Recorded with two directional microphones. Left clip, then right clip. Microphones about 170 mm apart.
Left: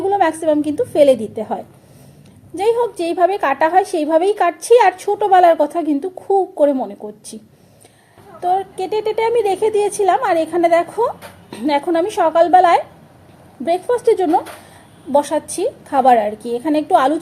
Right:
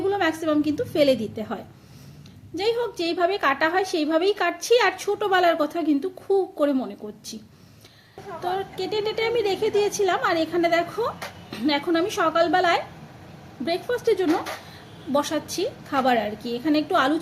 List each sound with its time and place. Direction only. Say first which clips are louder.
0.0 s a woman's voice: left 8 dB; 5° left (ahead or behind)
8.4 s a woman's voice: left 10 dB; 5° left (ahead or behind)